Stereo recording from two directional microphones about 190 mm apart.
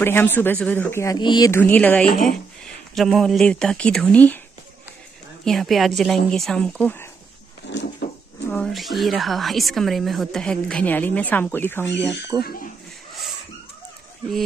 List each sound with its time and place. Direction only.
0.0 s speech: 10° left (ahead or behind)
1.6 s a woman's voice: 10° left (ahead or behind)
5.4 s a woman's voice: centre (ahead or behind)
7.6 s a sound: 65° left (ahead or behind)
8.5 s a woman's voice: centre (ahead or behind)